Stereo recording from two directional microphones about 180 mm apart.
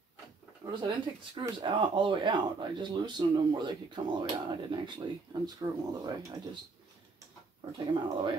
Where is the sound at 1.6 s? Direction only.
25° right (ahead or behind).